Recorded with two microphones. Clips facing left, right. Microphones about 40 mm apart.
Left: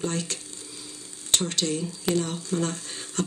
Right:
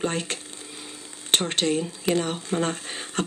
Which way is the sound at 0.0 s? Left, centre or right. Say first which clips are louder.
Right 3 dB; right.